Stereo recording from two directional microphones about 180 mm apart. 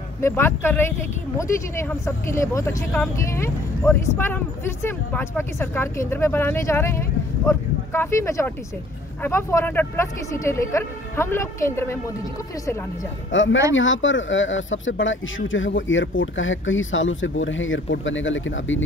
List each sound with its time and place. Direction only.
0.2 s speech: 15° left (ahead or behind)
13.3 s speech: 90° left